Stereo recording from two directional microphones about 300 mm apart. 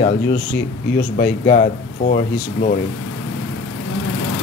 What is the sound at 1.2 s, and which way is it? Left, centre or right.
A man's voice, left.